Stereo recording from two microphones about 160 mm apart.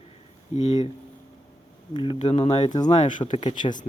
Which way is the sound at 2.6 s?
25° left (ahead or behind).